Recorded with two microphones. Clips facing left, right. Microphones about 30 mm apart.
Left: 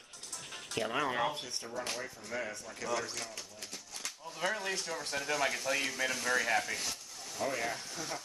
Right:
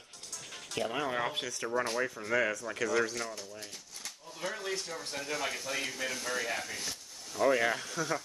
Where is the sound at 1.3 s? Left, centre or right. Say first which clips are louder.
Right 7 dB; right.